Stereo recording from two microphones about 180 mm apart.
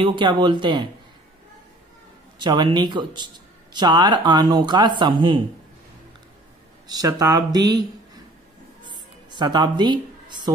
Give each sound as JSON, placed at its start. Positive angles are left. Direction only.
{"t": 0.0, "sound": "speech", "side_deg": -25}
{"t": 2.4, "sound": "speech", "side_deg": -25}
{"t": 6.9, "sound": "speech", "side_deg": -20}
{"t": 8.8, "sound": "music", "side_deg": -25}